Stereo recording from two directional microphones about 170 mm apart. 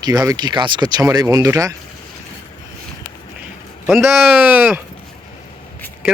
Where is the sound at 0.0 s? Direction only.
25° right (ahead or behind).